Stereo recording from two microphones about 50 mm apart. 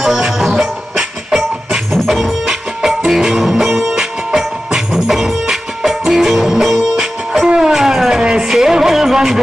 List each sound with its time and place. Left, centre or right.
0.0 s music: centre